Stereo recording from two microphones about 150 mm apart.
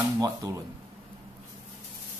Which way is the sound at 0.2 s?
20° right (ahead or behind).